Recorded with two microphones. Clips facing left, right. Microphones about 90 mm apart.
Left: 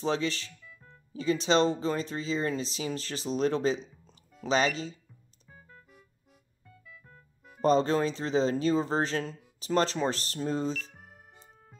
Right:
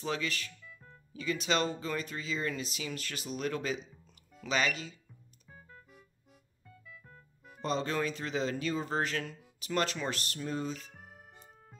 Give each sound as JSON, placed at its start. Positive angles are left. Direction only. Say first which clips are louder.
{"t": 0.0, "sound": "speech", "louder": "left 6 dB", "side_deg": 30}
{"t": 0.7, "sound": "music", "louder": "even", "side_deg": 0}
{"t": 1.1, "sound": "speech", "louder": "left 6 dB", "side_deg": 30}
{"t": 4.0, "sound": "music", "louder": "left 6 dB", "side_deg": 35}
{"t": 5.5, "sound": "music", "louder": "even", "side_deg": 0}
{"t": 7.6, "sound": "speech", "louder": "left 8 dB", "side_deg": 35}
{"t": 10.8, "sound": "music", "louder": "left 5 dB", "side_deg": 0}